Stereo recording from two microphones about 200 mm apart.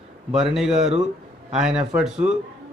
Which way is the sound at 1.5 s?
5° right (ahead or behind).